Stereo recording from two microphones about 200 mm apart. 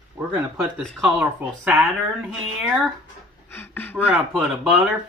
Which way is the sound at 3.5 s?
10° left (ahead or behind).